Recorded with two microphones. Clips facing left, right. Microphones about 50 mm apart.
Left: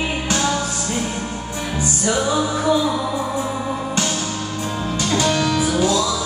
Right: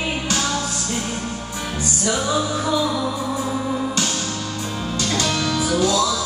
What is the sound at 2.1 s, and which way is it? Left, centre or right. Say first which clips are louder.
Music: left 2 dB; centre.